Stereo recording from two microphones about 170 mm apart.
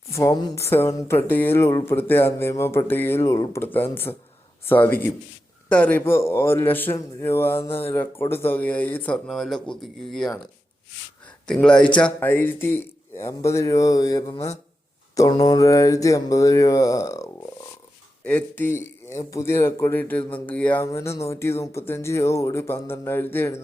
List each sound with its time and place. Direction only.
0.1 s speech: 20° left (ahead or behind); by 10.4 s centre (ahead or behind)
11.4 s speech: 5° left (ahead or behind)
15.1 s mantra: 20° left (ahead or behind)
18.3 s speech: 10° left (ahead or behind)